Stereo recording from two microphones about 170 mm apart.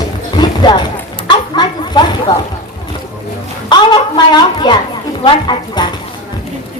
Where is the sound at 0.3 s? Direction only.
25° left (ahead or behind).